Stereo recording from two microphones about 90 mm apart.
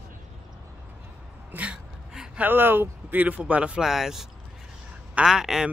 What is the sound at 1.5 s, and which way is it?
Speech, 15° right (ahead or behind).